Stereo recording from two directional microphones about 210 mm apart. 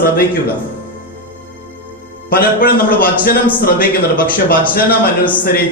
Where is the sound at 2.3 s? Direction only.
45° left (ahead or behind).